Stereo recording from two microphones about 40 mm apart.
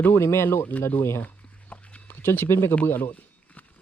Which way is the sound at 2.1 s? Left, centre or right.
Left.